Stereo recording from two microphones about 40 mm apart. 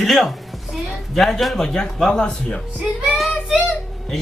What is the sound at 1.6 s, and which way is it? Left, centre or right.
Speech, centre.